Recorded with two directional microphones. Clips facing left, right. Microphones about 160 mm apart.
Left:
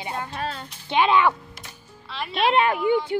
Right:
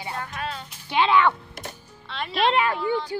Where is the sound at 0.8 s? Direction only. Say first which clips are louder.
Left 1 dB; 20° left (ahead or behind).